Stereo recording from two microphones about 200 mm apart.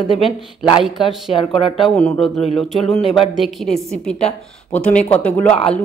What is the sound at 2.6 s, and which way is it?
Speech, centre (ahead or behind).